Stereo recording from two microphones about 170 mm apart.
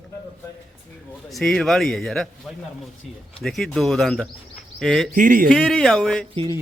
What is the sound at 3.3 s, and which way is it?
Speech, centre (ahead or behind).